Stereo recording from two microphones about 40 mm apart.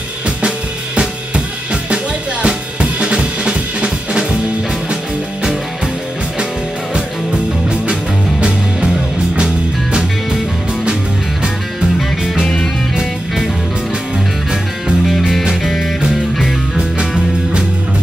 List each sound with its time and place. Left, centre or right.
0.9 s music: right
2.4 s drum kit: right
15.6 s music: centre
16.7 s music: right